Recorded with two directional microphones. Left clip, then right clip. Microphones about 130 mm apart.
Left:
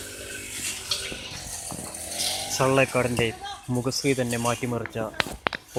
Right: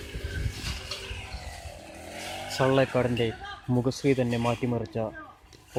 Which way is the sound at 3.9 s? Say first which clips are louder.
Left 2 dB; 25° right (ahead or behind).